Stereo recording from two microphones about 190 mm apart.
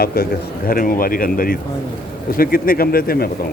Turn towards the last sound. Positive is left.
turn(degrees=50)  # may be behind; listen again after turning